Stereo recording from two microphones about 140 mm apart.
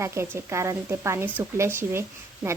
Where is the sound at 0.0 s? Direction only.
20° right (ahead or behind).